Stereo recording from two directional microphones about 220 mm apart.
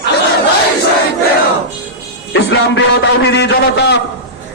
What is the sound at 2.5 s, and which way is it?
A man's voice, 55° left (ahead or behind).